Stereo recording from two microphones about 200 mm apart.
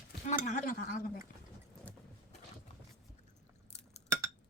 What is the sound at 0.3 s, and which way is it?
Speech, 35° left (ahead or behind).